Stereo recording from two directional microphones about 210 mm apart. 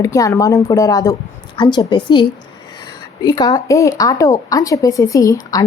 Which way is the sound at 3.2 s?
20° left (ahead or behind).